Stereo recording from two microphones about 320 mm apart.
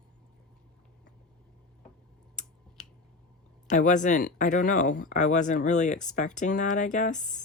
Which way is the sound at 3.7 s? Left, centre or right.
Left.